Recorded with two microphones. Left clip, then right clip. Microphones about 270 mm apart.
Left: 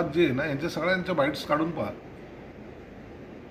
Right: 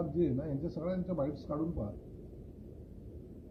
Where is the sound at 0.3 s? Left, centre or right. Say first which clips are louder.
Left 10 dB; centre.